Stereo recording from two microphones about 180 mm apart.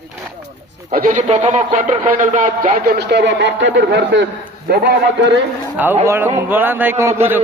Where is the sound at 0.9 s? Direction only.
45° right (ahead or behind).